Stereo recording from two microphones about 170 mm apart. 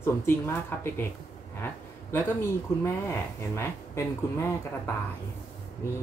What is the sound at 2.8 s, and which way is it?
Speech, 15° left (ahead or behind).